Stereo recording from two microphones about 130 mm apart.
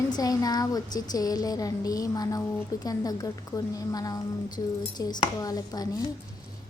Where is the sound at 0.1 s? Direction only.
30° left (ahead or behind).